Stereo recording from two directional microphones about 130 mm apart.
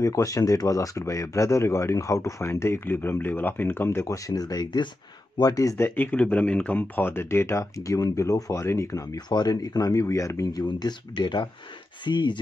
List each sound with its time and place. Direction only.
0.0 s speech: 25° left (ahead or behind)
5.9 s speech: 15° left (ahead or behind); by 12.4 s 35° left (ahead or behind)